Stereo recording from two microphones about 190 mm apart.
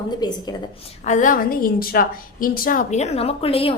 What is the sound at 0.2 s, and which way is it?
Speech, 20° left (ahead or behind).